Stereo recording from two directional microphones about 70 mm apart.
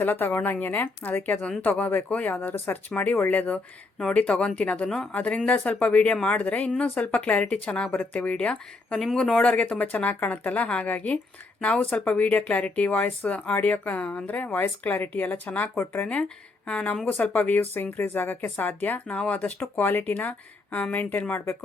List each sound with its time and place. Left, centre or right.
0.0 s speech: left